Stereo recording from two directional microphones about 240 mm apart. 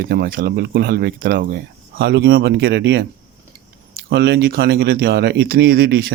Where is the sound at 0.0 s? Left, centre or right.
Right.